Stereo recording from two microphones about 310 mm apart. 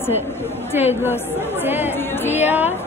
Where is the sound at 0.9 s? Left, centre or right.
Centre.